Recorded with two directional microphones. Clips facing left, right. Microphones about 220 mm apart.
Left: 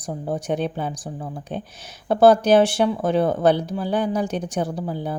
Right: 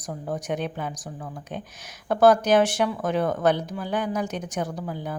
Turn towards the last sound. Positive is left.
turn(degrees=30)  # may be behind; listen again after turning